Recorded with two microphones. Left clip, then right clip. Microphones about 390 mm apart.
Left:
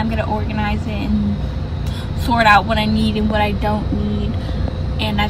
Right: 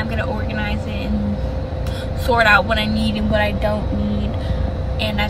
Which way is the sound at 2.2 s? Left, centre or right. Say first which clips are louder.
Left 1 dB; centre.